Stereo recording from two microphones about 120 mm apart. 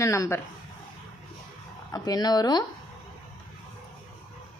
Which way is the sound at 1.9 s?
35° left (ahead or behind).